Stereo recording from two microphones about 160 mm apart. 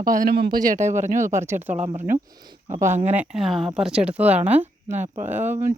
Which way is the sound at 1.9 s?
60° right (ahead or behind).